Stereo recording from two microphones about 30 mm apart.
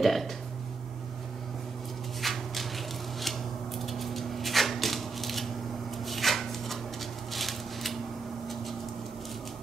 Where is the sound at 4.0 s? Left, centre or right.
Centre.